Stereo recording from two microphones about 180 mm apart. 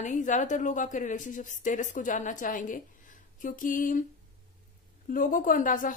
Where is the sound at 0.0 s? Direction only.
45° left (ahead or behind).